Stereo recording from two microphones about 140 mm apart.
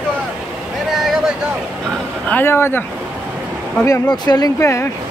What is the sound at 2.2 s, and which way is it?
Speech, 15° left (ahead or behind).